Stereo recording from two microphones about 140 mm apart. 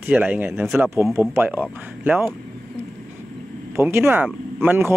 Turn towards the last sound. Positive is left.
turn(degrees=-15)  # may be behind; listen again after turning